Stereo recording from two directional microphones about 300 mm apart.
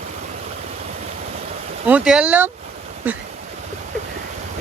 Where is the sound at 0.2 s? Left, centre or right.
Right.